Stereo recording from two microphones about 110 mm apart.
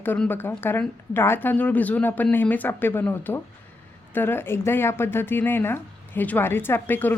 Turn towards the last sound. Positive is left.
turn(degrees=20)  # may be behind; listen again after turning